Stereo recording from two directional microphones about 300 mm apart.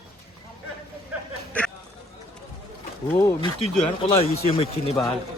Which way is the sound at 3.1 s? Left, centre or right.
Centre.